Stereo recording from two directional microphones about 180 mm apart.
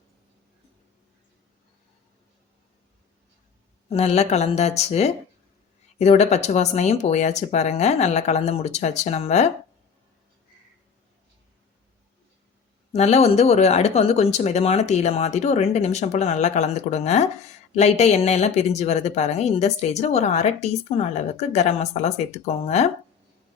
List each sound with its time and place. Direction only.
3.8 s speech: 35° left (ahead or behind)
12.9 s speech: 40° left (ahead or behind)